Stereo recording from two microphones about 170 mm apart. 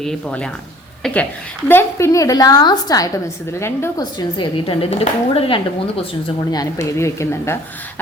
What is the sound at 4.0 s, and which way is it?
Speech, 25° left (ahead or behind).